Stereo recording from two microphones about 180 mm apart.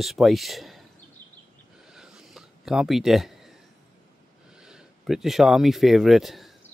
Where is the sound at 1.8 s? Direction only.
5° right (ahead or behind).